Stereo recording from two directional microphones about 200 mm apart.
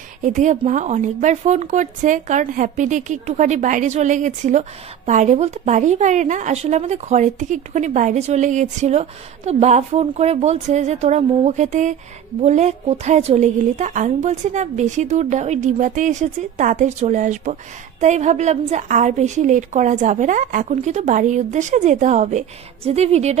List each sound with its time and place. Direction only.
0.2 s speech: 40° right (ahead or behind)